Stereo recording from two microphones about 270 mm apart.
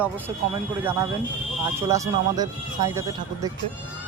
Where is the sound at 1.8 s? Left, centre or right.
Centre.